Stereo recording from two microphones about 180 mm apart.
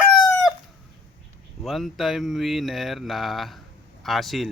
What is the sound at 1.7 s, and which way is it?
Speech, centre (ahead or behind).